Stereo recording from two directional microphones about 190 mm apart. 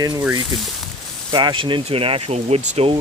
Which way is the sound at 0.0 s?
15° right (ahead or behind).